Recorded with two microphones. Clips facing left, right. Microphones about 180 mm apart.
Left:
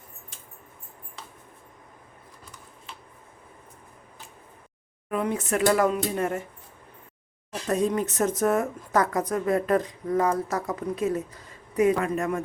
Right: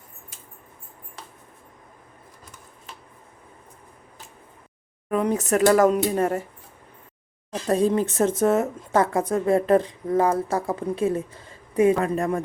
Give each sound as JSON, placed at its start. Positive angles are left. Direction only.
{"t": 5.0, "sound": "speech", "side_deg": -40}
{"t": 7.7, "sound": "speech", "side_deg": -30}